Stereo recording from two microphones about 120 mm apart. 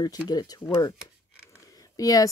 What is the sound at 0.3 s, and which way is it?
Speech, 35° left (ahead or behind).